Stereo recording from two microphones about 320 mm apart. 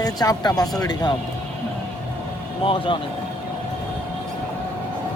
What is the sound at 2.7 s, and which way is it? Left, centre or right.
Speech, centre.